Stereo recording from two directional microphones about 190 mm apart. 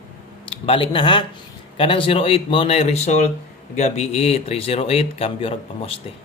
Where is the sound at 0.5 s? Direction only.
30° left (ahead or behind).